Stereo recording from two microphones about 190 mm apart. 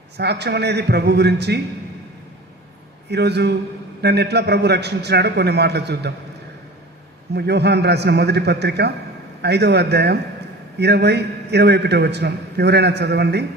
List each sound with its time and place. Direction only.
0.2 s a man's voice: 60° right (ahead or behind)
3.1 s a man's voice: 60° right (ahead or behind)
7.3 s a man's voice: 60° right (ahead or behind)